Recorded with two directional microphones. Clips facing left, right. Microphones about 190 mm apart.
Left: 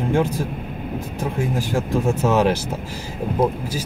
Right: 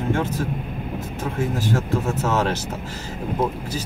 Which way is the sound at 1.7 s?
15° left (ahead or behind).